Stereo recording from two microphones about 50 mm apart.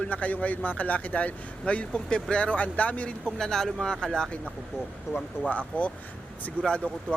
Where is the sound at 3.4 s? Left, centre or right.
Centre.